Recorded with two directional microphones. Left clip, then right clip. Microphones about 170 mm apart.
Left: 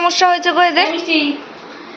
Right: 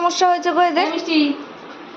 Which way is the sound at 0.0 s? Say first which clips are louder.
Left 3 dB; 20° right (ahead or behind).